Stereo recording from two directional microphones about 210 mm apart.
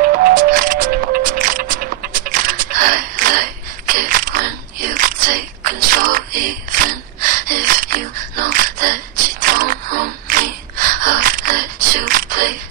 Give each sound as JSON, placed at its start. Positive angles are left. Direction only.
{"t": 0.0, "sound": "music", "side_deg": -45}